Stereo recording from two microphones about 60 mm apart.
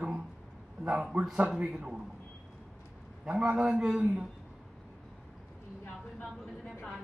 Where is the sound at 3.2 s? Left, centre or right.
Right.